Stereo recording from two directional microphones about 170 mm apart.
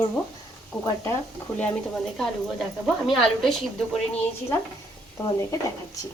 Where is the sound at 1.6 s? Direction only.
5° left (ahead or behind).